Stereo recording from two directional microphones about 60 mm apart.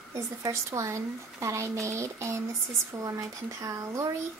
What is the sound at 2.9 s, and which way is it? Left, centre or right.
Speech, right.